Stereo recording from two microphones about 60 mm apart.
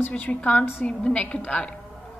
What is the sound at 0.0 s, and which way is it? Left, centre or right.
A woman's voice, left.